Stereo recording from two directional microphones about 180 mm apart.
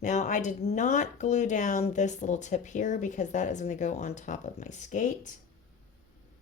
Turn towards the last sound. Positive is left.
turn(degrees=45)  # may be behind; listen again after turning